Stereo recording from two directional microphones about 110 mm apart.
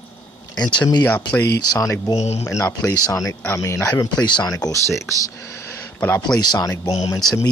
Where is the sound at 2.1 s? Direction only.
90° left.